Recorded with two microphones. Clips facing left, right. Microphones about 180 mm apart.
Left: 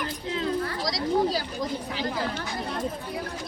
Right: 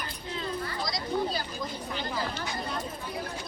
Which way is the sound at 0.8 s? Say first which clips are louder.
Left 6 dB; 90° left.